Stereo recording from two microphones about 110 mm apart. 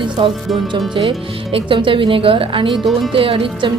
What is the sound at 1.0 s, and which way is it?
Speech, 55° right (ahead or behind).